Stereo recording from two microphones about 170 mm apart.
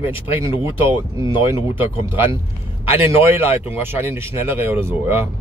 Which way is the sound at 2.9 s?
15° right (ahead or behind).